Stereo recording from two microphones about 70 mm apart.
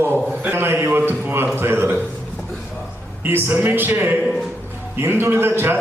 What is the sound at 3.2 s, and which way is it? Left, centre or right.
A man's voice, right.